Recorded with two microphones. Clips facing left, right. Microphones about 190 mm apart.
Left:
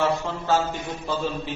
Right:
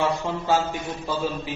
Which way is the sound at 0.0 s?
15° right (ahead or behind).